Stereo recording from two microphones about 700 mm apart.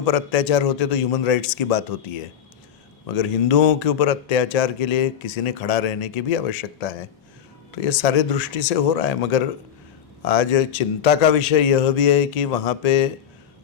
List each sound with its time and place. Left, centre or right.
0.0 s speech: left